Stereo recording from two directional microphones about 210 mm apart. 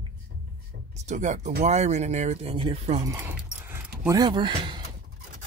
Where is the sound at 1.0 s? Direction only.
35° right (ahead or behind).